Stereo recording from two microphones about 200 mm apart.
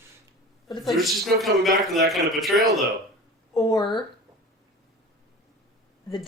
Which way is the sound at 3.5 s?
20° left (ahead or behind).